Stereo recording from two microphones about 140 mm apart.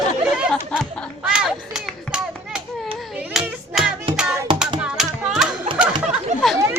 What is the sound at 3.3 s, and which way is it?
Hands, 5° right (ahead or behind).